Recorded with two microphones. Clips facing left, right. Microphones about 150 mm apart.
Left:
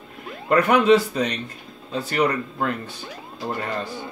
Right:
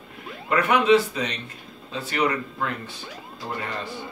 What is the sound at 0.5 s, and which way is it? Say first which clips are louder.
A man's voice: left 3 dB; 40° left (ahead or behind).